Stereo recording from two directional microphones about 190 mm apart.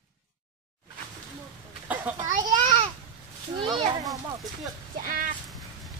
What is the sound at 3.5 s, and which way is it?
Speech, 25° right (ahead or behind).